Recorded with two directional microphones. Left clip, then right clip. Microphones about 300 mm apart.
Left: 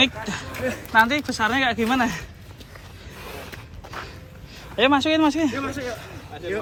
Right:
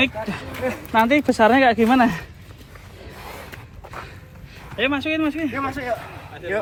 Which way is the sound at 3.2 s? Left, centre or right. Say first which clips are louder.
Left 1 dB; centre.